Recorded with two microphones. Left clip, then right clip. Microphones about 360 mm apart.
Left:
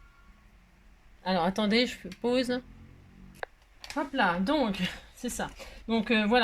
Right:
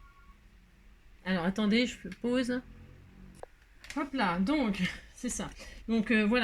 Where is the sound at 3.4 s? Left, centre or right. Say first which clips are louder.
Left 9 dB; left.